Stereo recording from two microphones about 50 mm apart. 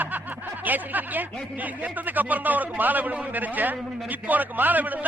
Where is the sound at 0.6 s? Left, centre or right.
Right.